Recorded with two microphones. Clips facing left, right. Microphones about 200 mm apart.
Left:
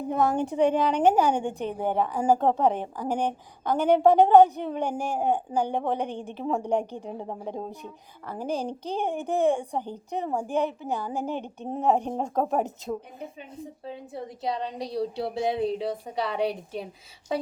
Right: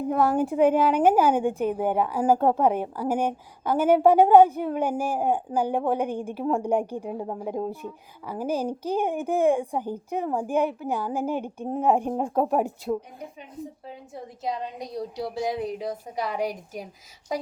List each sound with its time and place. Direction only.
0.1 s a woman's voice: 5° right (ahead or behind)
13.8 s a woman's voice: 30° left (ahead or behind)